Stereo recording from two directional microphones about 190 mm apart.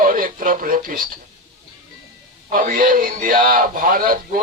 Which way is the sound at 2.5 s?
45° right (ahead or behind).